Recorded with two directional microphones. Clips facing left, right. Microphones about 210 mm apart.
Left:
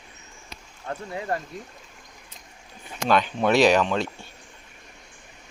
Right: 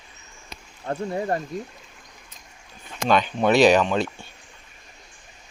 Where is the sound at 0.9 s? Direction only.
30° right (ahead or behind).